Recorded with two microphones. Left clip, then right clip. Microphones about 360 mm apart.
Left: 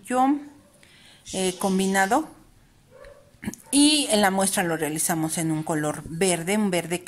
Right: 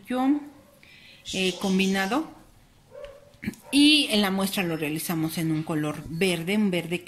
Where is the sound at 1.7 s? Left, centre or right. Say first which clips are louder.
Left 6 dB; centre.